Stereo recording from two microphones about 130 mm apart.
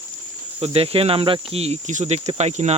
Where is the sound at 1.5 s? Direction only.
55° right (ahead or behind).